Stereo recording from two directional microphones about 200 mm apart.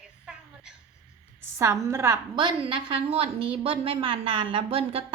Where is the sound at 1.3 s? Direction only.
15° right (ahead or behind).